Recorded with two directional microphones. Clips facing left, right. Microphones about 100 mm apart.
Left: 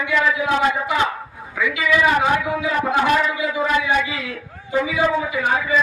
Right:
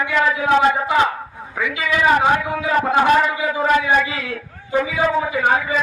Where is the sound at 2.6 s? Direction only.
40° right (ahead or behind).